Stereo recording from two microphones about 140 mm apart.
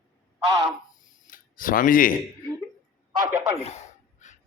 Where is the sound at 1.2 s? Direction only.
85° left.